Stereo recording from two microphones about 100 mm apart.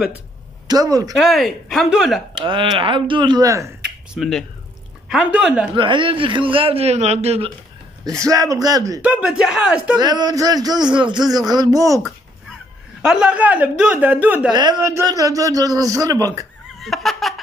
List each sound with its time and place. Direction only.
0.7 s speech: 35° right (ahead or behind)
1.1 s speech: centre (ahead or behind)
2.4 s a man's voice: 55° right (ahead or behind)
3.4 s speech: 30° right (ahead or behind)
4.1 s speech: centre (ahead or behind)
5.3 s speech: 10° right (ahead or behind)
5.8 s a man's voice: 55° right (ahead or behind); by 7.5 s 85° right
8.0 s speech: 35° right (ahead or behind)
9.0 s speech: 10° right (ahead or behind)
9.9 s speech: 45° right (ahead or behind)
13.0 s speech: 5° right (ahead or behind)
14.5 s speech: 45° right (ahead or behind)
14.8 s speech: 30° right (ahead or behind)
16.8 s a sound: centre (ahead or behind)